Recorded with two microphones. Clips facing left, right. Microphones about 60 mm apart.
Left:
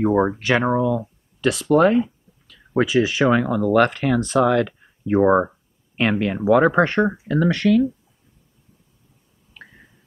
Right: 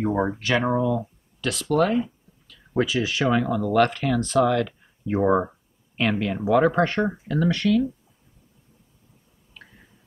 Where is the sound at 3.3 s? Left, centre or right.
Left.